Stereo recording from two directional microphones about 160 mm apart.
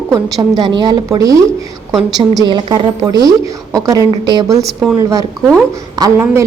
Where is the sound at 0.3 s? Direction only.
25° right (ahead or behind).